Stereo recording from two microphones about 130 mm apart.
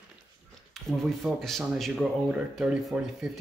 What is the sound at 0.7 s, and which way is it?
Speech, centre (ahead or behind).